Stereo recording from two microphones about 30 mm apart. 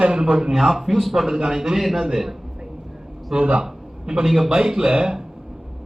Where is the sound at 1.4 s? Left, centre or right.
Centre.